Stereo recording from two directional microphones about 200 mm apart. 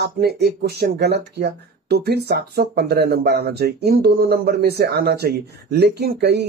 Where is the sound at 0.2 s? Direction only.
50° right (ahead or behind).